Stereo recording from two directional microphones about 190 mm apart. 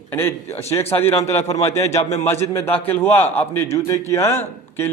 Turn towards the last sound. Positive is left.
turn(degrees=10)  # may be behind; listen again after turning